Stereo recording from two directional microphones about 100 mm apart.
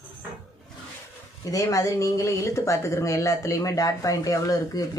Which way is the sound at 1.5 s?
35° left (ahead or behind).